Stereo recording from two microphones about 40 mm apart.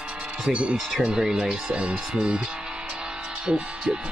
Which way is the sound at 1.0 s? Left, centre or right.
Centre.